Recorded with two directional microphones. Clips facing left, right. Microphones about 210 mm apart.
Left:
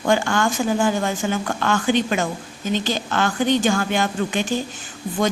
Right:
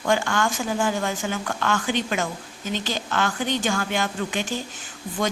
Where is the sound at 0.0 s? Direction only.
30° left (ahead or behind).